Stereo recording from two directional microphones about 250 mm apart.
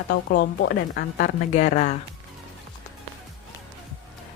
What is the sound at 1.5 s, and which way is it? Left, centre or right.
Speech, left.